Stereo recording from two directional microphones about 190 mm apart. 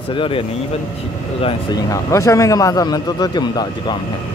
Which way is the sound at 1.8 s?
15° left (ahead or behind).